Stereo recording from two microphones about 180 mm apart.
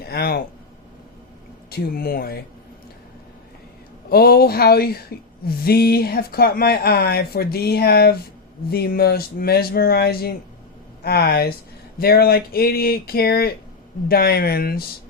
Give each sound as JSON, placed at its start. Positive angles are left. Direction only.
{"t": 0.0, "sound": "speech", "side_deg": 60}
{"t": 1.7, "sound": "speech", "side_deg": 55}
{"t": 4.1, "sound": "speech", "side_deg": 55}